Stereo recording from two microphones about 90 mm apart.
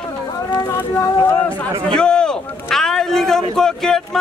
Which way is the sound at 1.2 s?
25° left (ahead or behind).